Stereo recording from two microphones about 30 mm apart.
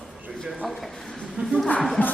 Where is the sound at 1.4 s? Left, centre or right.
Right.